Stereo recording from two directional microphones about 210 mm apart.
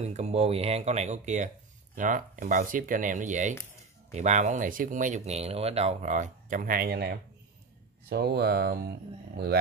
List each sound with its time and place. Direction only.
0.0 s speech: 30° right (ahead or behind); by 8.9 s 50° right (ahead or behind)